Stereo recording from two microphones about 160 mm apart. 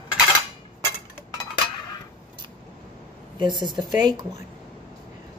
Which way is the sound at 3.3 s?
30° right (ahead or behind).